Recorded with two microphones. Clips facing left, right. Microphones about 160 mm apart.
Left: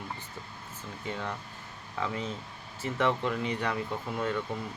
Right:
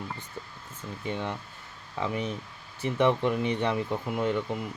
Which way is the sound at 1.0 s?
20° right (ahead or behind).